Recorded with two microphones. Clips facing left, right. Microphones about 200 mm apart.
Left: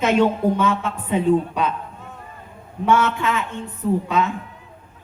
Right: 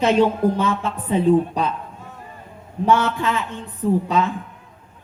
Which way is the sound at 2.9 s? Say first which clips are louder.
Even; 35° right (ahead or behind).